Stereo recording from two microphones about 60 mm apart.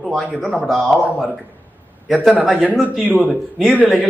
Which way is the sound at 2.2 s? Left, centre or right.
Centre.